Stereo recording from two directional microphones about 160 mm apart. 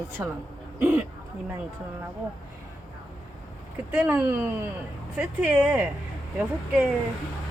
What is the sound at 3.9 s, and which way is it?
Speech, 10° right (ahead or behind).